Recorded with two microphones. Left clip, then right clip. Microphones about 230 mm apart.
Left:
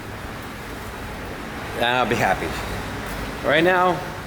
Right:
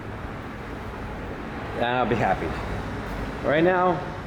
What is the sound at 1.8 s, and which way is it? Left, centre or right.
Speech, centre.